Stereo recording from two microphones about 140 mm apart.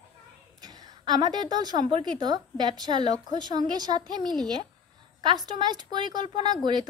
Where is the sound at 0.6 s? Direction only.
30° right (ahead or behind).